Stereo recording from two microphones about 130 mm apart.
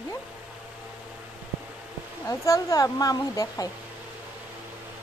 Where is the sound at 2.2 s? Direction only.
25° left (ahead or behind).